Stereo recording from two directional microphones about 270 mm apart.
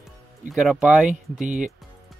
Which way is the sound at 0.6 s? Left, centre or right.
Centre.